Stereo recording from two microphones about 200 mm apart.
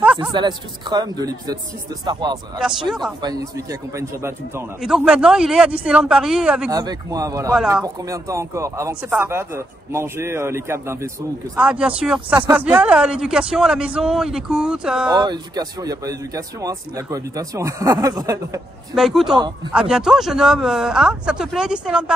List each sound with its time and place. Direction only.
0.0 s a sound: 5° right (ahead or behind)
0.3 s a man's voice: 20° right (ahead or behind)
2.9 s speech: centre (ahead or behind)
3.2 s speech: 20° right (ahead or behind)
4.8 s speech: 5° right (ahead or behind)
6.7 s speech: 20° right (ahead or behind)
15.0 s speech: 20° right (ahead or behind)
18.9 s speech: centre (ahead or behind)